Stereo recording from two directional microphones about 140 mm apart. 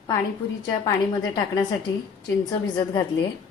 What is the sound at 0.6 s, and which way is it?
Speech, 25° left (ahead or behind).